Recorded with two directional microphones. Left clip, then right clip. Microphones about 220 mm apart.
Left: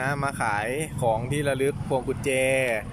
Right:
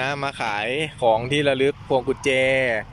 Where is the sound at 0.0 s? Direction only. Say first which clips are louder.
Right 2 dB; centre (ahead or behind).